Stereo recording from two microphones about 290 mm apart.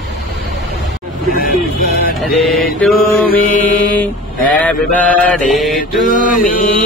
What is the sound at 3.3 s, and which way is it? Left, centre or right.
Mantra, left.